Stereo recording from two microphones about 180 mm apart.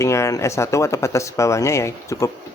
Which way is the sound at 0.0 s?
15° left (ahead or behind).